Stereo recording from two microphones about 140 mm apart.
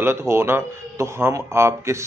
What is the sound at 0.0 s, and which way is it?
Speech, 20° right (ahead or behind).